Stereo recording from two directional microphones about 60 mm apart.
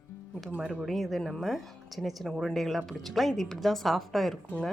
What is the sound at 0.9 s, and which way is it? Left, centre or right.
Speech, centre.